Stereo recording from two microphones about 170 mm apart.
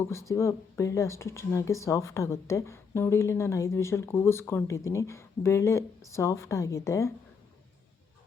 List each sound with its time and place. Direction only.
0.0 s speech: 15° left (ahead or behind)